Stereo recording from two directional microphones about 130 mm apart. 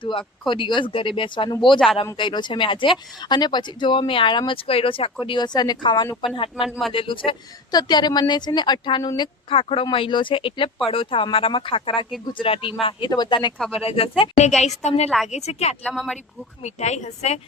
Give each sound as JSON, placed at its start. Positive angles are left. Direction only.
{"t": 0.0, "sound": "speech", "side_deg": 40}
{"t": 6.6, "sound": "speech", "side_deg": 0}
{"t": 6.9, "sound": "speech", "side_deg": 45}
{"t": 13.7, "sound": "a woman's voice", "side_deg": 45}
{"t": 15.8, "sound": "speech", "side_deg": 0}
{"t": 16.6, "sound": "a woman's voice", "side_deg": 60}